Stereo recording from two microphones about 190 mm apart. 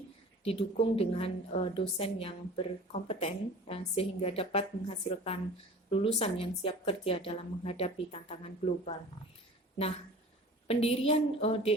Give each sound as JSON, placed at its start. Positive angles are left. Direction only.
{"t": 0.4, "sound": "a woman's voice", "side_deg": 30}
{"t": 10.7, "sound": "a woman's voice", "side_deg": 30}